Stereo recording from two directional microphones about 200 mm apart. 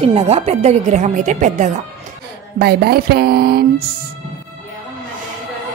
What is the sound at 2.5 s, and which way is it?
Speech, 50° right (ahead or behind).